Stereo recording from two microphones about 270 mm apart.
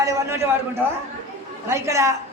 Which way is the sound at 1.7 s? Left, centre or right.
Centre.